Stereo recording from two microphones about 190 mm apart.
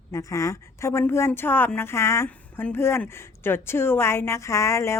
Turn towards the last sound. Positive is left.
turn(degrees=15)  # may be behind; listen again after turning